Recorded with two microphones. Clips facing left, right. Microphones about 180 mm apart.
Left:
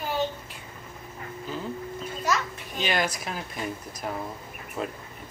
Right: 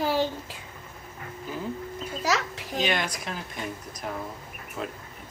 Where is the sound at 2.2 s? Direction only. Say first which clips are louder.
Right 1 dB; 90° right.